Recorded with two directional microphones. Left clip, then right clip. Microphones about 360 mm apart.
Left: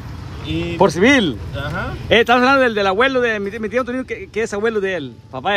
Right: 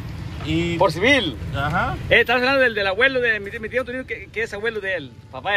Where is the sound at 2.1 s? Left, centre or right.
Centre.